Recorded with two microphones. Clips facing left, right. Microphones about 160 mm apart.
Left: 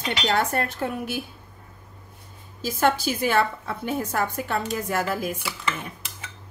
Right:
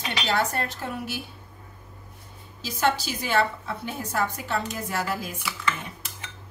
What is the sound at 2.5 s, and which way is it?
A woman's voice, 50° left (ahead or behind).